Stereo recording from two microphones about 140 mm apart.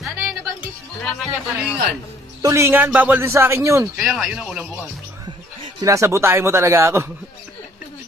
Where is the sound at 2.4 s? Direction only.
20° right (ahead or behind).